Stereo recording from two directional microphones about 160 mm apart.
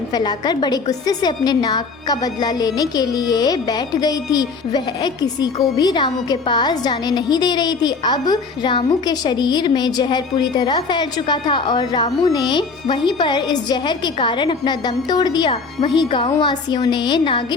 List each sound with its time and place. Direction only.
0.1 s a woman's voice: 25° left (ahead or behind)